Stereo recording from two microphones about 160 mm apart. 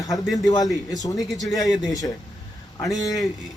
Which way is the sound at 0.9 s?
20° left (ahead or behind).